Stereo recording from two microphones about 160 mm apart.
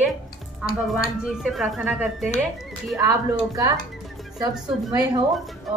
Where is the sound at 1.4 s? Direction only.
Centre (ahead or behind).